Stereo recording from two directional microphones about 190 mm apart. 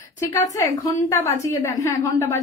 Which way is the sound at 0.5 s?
20° left (ahead or behind).